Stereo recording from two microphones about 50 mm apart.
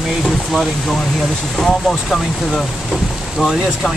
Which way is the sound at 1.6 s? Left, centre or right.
Centre.